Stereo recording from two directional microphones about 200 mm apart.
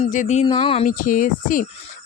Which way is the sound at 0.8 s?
40° left (ahead or behind).